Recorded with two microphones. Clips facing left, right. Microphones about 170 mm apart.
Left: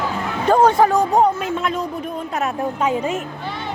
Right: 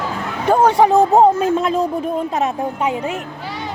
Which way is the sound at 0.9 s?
25° right (ahead or behind).